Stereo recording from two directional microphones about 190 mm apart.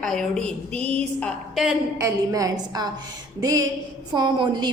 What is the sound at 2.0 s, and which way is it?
Speech, 15° right (ahead or behind).